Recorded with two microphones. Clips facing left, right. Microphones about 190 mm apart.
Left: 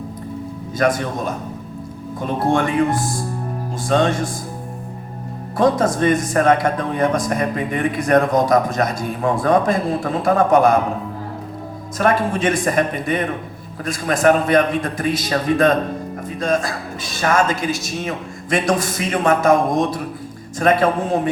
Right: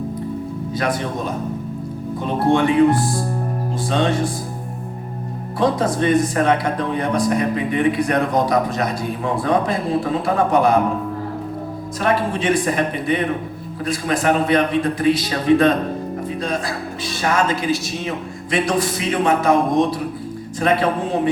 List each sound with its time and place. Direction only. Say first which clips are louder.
0.7 s speech: left 4 dB; 45° left (ahead or behind)
2.5 s speech: right 4 dB; 45° left (ahead or behind)
5.5 s speech: left 2 dB; 45° left (ahead or behind)
11.9 s speech: left 2 dB; 45° left (ahead or behind)